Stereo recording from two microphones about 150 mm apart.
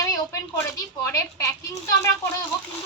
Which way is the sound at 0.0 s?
20° left (ahead or behind).